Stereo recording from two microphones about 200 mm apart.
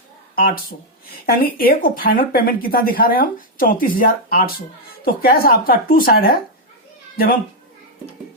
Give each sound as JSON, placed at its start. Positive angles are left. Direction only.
{"t": 1.3, "sound": "speech", "side_deg": 45}